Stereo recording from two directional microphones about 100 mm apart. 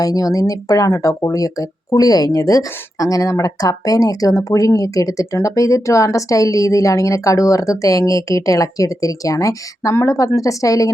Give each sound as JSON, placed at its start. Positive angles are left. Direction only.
{"t": 0.0, "sound": "speech", "side_deg": 35}